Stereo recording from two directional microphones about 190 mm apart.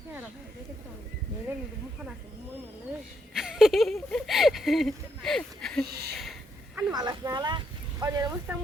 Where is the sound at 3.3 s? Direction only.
Centre (ahead or behind).